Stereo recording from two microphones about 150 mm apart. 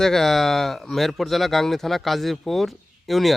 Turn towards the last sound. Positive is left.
turn(degrees=0)  # may be behind; listen again after turning